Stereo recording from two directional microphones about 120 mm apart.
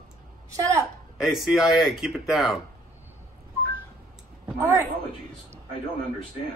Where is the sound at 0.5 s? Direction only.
25° right (ahead or behind).